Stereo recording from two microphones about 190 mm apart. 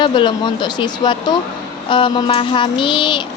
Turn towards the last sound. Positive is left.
turn(degrees=25)  # may be behind; listen again after turning